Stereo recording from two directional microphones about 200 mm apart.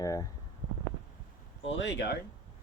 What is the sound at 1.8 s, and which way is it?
Speech, 60° left (ahead or behind).